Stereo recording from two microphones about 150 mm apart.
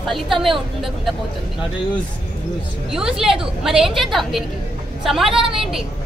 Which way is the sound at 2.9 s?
5° right (ahead or behind).